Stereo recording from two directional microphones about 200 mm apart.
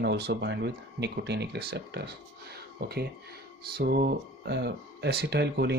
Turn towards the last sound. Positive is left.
turn(degrees=-55)  # may be behind; listen again after turning